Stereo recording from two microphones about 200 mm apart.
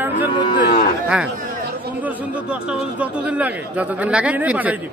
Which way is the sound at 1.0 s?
5° right (ahead or behind).